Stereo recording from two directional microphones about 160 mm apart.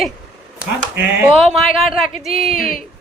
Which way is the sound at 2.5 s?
60° left (ahead or behind).